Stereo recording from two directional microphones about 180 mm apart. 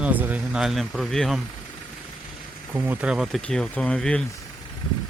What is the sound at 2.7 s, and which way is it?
Speech, 10° right (ahead or behind).